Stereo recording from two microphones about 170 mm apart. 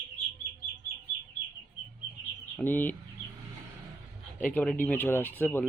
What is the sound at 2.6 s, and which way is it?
Speech, 10° left (ahead or behind).